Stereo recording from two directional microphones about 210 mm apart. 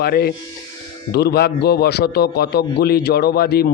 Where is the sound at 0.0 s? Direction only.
50° left (ahead or behind).